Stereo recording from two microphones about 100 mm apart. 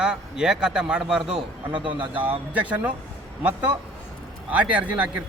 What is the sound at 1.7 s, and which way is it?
Speech, 55° right (ahead or behind).